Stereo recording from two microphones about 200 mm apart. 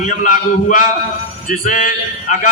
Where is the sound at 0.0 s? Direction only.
40° left (ahead or behind).